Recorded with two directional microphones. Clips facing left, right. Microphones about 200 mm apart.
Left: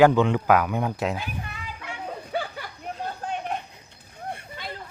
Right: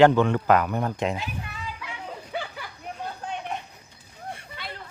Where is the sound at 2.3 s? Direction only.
40° left (ahead or behind).